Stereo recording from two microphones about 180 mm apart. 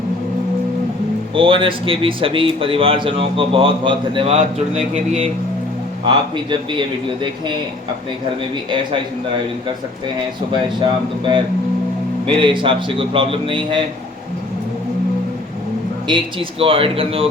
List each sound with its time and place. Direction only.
1.4 s speech: 30° right (ahead or behind)
12.2 s speech: 30° right (ahead or behind)
16.0 s speech: 30° right (ahead or behind)